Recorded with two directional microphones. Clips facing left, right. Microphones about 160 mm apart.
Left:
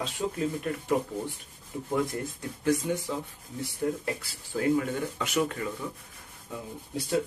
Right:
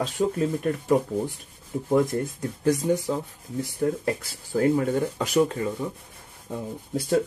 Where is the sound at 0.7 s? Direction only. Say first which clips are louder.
Right 7 dB; 40° right (ahead or behind).